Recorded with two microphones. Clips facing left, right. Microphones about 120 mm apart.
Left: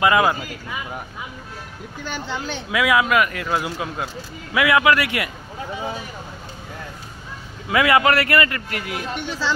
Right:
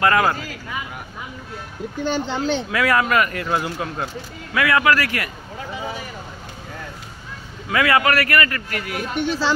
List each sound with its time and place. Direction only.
0.0 s speech: 10° left (ahead or behind)
2.0 s speech: 25° right (ahead or behind)
2.7 s speech: 5° left (ahead or behind)
7.7 s a man's voice: 20° left (ahead or behind)